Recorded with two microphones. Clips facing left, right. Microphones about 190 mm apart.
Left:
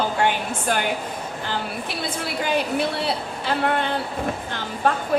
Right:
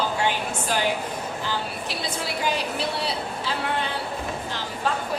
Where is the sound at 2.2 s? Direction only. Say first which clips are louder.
Left 4 dB; 55° left (ahead or behind).